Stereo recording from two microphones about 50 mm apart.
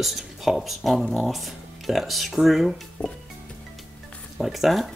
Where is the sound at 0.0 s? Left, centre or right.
Centre.